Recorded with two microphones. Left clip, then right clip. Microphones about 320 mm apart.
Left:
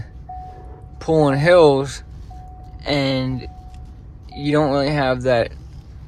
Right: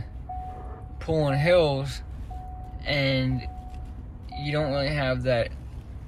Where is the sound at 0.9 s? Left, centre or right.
Centre.